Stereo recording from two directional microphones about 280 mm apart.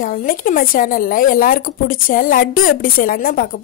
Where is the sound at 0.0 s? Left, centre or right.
Left.